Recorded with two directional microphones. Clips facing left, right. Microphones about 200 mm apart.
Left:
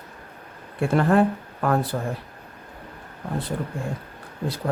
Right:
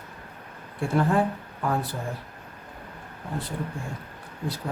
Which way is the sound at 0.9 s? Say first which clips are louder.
Left 4 dB; 70° left (ahead or behind).